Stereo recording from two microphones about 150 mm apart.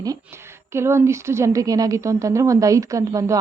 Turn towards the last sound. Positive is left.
turn(degrees=-20)  # may be behind; listen again after turning